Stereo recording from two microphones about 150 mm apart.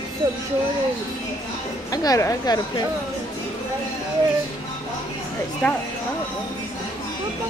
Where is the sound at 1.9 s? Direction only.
25° left (ahead or behind).